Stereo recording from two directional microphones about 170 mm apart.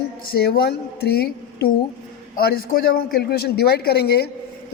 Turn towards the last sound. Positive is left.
turn(degrees=70)  # may be behind; listen again after turning